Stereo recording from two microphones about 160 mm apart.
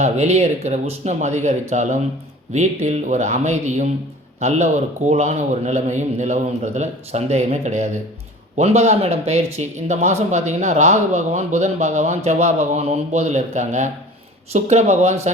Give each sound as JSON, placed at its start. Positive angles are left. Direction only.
{"t": 0.0, "sound": "speech", "side_deg": -40}